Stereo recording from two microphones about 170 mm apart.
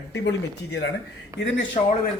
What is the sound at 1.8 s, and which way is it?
Speech, 40° left (ahead or behind).